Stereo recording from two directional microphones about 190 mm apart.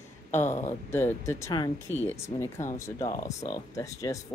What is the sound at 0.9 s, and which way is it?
Speech, 15° left (ahead or behind).